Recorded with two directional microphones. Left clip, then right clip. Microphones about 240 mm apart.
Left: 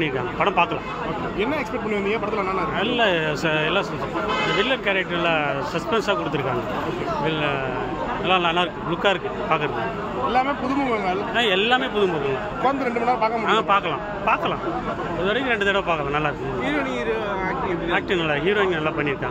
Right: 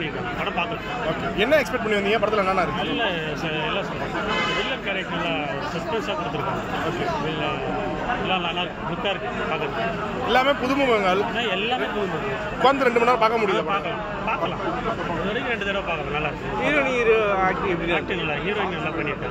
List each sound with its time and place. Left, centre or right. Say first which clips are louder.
1.4 s speech: right 6 dB; right
3.0 s a man's voice: left 5 dB; left
8.3 s a man's voice: left 5 dB; left
10.3 s speech: right 3 dB; right
11.3 s a man's voice: left 5 dB; left
12.6 s speech: right 4 dB; right
13.5 s a man's voice: left 4 dB; left
16.6 s speech: right 6 dB; centre
17.9 s a man's voice: left 3 dB; left